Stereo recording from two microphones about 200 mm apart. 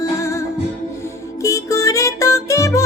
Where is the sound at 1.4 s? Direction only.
15° left (ahead or behind).